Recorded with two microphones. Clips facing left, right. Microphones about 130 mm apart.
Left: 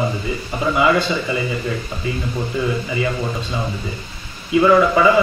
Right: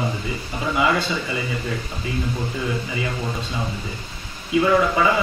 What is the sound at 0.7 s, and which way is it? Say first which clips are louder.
Speech: left 4 dB; 60° left (ahead or behind).